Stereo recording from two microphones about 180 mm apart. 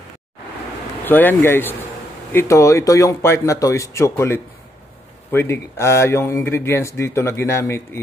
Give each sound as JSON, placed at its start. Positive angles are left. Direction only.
{"t": 1.0, "sound": "speech", "side_deg": 10}